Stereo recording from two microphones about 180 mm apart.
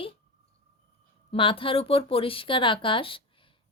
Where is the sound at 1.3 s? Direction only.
30° left (ahead or behind).